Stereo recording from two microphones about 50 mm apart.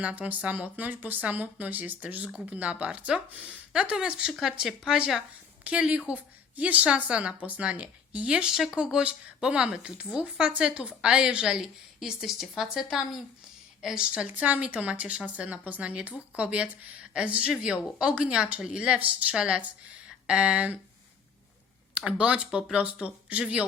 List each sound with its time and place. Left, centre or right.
0.0 s a woman's voice: right
3.7 s a woman's voice: centre
8.4 s a woman's voice: centre
13.8 s a woman's voice: centre
14.3 s a woman's voice: right
21.9 s a woman's voice: right